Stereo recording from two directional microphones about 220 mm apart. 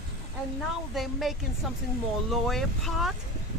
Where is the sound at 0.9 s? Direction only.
Centre (ahead or behind).